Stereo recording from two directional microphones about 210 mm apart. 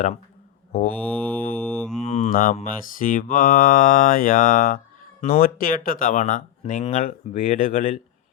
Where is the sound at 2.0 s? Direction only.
30° left (ahead or behind).